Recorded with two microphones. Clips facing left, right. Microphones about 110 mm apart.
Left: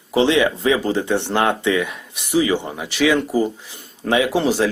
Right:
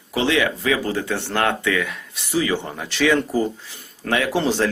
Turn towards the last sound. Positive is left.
turn(degrees=10)  # may be behind; listen again after turning